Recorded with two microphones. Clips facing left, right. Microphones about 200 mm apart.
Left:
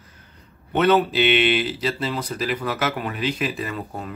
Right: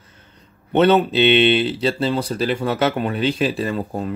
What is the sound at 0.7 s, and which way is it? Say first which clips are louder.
Speech: right 3 dB; 25° right (ahead or behind).